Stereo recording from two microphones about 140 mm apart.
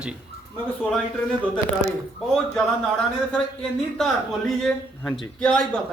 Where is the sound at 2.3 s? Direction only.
5° left (ahead or behind).